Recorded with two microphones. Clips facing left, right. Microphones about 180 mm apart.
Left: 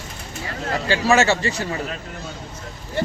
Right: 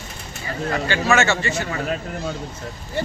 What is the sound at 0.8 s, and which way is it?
Speech, 35° left (ahead or behind).